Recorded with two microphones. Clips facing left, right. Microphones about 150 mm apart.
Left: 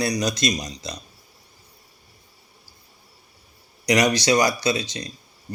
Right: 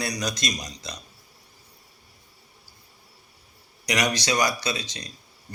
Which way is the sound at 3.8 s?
30° left (ahead or behind).